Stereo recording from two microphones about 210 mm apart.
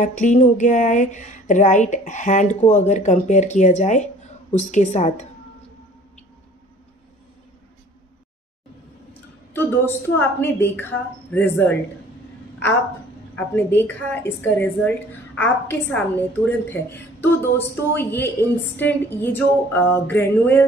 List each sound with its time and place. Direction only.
0.0 s a sound: 35° left (ahead or behind)
9.5 s a woman's voice: 10° left (ahead or behind)
13.6 s a woman's voice: 10° left (ahead or behind)